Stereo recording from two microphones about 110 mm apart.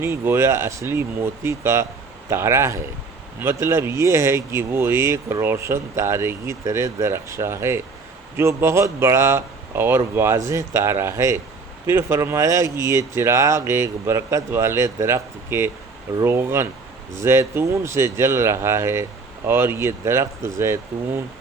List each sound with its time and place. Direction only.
0.0 s speech: 20° right (ahead or behind)